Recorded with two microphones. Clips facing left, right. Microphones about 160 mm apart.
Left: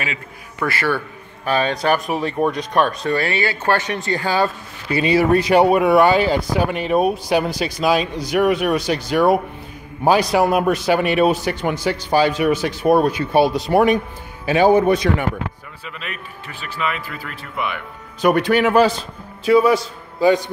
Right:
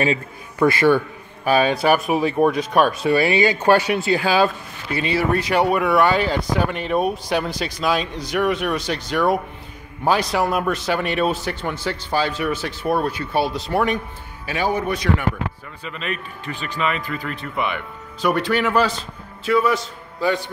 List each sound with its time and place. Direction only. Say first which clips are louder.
0.6 s a man's voice: right 6 dB; 15° right (ahead or behind)
4.9 s a man's voice: left 5 dB; 15° left (ahead or behind)
15.8 s speech: right 4 dB; 5° left (ahead or behind)
18.4 s a man's voice: left 5 dB; 15° left (ahead or behind)